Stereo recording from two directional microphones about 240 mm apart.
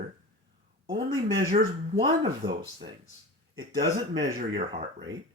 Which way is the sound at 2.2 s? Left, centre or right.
Centre.